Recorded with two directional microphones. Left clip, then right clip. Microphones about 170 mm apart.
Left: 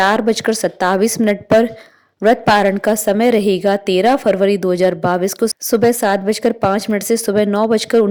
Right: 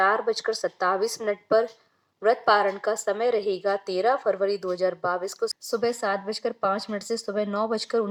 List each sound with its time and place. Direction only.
0.0 s speech: 40° left (ahead or behind)